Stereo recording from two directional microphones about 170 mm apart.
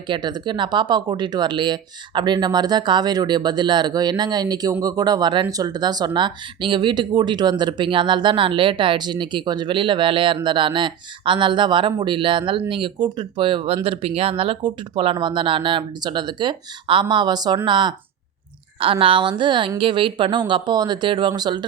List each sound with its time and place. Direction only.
0.1 s speech: 25° right (ahead or behind)